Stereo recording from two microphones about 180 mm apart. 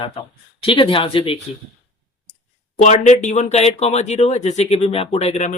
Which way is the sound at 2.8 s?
40° left (ahead or behind).